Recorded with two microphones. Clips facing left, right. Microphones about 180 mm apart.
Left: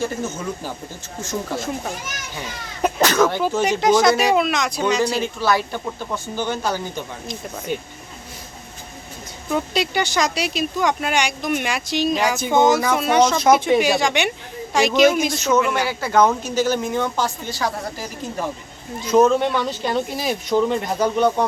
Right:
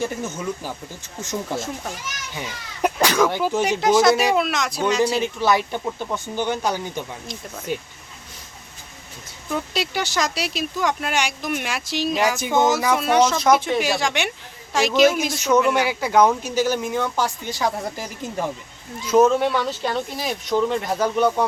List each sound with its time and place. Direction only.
0.0 s speech: 15° right (ahead or behind)
1.5 s speech: centre (ahead or behind)
5.2 s speech: 20° right (ahead or behind)
7.7 s speech: 5° right (ahead or behind)
9.5 s speech: centre (ahead or behind); by 17.7 s 15° right (ahead or behind)
19.1 s speech: 5° right (ahead or behind)